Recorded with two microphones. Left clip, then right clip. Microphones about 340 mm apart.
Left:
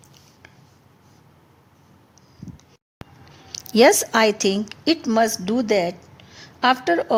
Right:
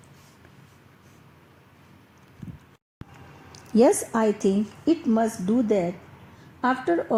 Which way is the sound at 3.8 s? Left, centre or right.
Left.